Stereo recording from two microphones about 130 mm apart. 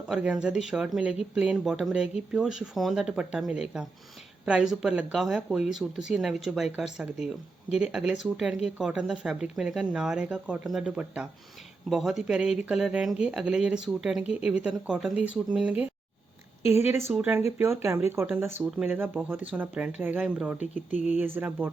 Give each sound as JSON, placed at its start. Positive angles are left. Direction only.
{"t": 0.1, "sound": "speech", "side_deg": -10}
{"t": 17.1, "sound": "speech", "side_deg": -15}